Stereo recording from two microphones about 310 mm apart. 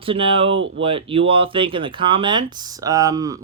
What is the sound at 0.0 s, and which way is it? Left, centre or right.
Speech, centre.